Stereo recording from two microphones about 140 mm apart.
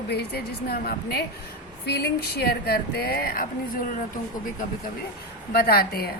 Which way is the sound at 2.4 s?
90° left.